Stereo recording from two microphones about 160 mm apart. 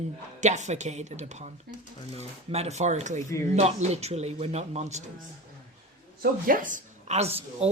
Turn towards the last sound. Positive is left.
turn(degrees=-40)  # may be behind; listen again after turning